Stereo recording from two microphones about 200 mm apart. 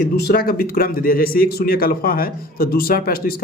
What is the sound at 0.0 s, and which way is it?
Speech, 50° left (ahead or behind).